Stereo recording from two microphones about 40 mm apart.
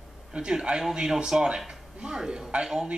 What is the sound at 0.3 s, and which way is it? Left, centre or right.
A man's voice, right.